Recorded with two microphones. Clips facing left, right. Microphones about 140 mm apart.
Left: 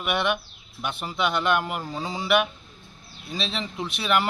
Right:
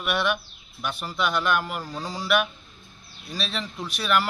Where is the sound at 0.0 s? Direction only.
20° left (ahead or behind).